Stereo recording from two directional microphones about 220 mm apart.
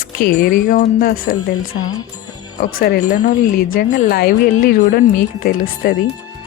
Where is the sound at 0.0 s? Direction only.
40° left (ahead or behind).